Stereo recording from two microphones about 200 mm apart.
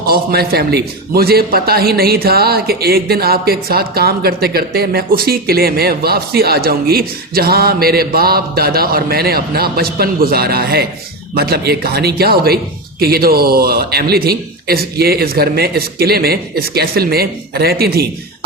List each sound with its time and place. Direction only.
0.1 s a man's voice: 50° right (ahead or behind)